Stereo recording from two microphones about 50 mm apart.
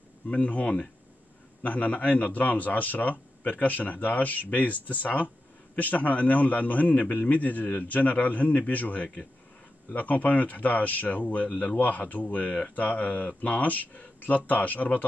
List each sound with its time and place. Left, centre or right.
0.3 s speech: left